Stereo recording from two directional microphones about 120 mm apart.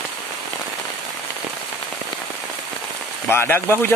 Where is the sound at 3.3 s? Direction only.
20° left (ahead or behind).